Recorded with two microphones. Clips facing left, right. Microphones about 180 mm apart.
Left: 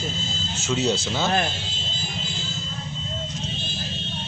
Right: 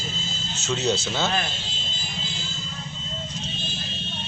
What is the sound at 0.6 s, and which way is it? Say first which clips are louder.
Speech: left 1 dB; 10° left (ahead or behind).